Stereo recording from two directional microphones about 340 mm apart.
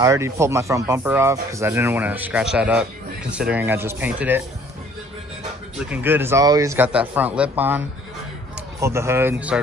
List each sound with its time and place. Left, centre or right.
0.0 s speech: centre
5.9 s a man's voice: centre